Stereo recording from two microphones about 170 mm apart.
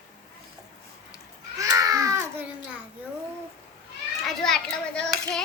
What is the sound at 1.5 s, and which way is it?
Babbling, 20° right (ahead or behind).